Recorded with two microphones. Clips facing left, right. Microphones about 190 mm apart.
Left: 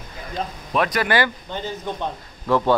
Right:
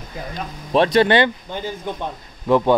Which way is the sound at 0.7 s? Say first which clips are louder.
Right 6 dB; 25° right (ahead or behind).